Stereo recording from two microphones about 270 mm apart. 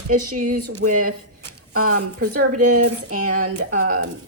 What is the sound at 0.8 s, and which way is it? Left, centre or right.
Speech, right.